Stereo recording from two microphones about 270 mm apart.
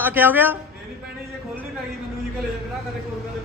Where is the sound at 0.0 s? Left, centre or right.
Centre.